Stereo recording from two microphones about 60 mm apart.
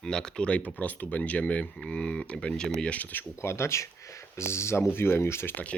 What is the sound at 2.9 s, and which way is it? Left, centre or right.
Speech, left.